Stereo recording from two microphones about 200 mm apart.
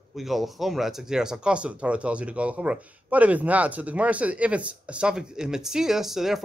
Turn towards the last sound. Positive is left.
turn(degrees=0)  # may be behind; listen again after turning